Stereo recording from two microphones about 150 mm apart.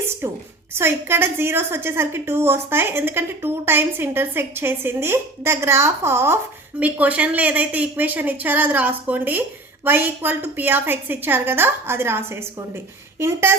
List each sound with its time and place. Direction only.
0.7 s a woman's voice: 15° right (ahead or behind)